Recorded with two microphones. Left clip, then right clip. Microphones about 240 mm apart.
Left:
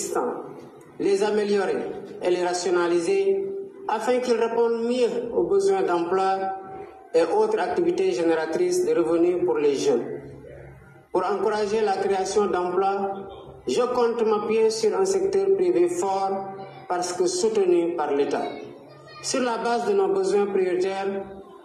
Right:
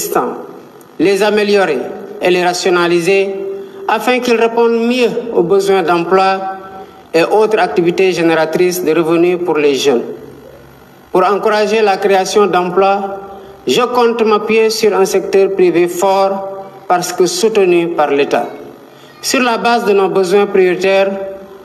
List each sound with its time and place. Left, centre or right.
0.2 s a man's voice: right
11.1 s a man's voice: right